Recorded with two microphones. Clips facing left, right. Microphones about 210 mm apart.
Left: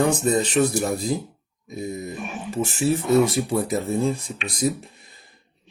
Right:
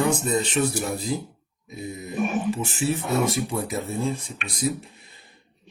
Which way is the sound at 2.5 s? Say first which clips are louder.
Left 3 dB; 40° left (ahead or behind).